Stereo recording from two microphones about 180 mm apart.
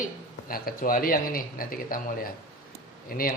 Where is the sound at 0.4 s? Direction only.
55° left (ahead or behind).